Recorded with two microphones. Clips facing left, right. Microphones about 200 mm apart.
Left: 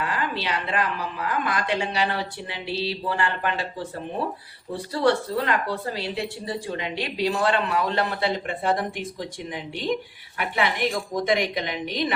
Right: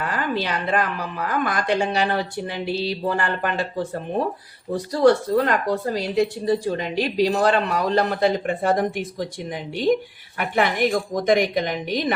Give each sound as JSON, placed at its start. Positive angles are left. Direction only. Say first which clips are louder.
{"t": 0.0, "sound": "speech", "louder": "right 3 dB", "side_deg": -45}